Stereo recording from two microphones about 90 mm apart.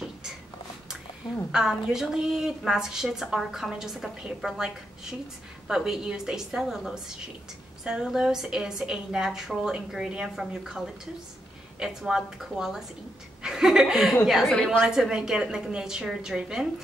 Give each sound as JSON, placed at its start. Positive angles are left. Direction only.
{"t": 1.5, "sound": "a woman's voice", "side_deg": -5}
{"t": 11.8, "sound": "a woman's voice", "side_deg": -5}
{"t": 14.5, "sound": "a woman's voice", "side_deg": 10}
{"t": 14.8, "sound": "a woman's voice", "side_deg": -5}